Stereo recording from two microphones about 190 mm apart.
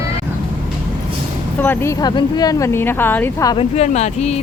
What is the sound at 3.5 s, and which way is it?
Speech, 35° left (ahead or behind).